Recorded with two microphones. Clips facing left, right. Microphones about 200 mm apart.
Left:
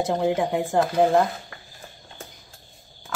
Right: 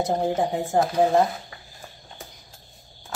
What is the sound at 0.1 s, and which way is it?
Speech, 65° left (ahead or behind).